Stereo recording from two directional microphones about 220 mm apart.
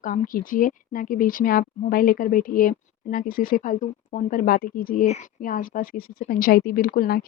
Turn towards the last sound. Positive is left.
turn(degrees=40)  # may be behind; listen again after turning